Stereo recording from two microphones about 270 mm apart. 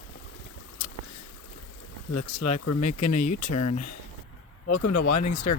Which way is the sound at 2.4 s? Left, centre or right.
Left.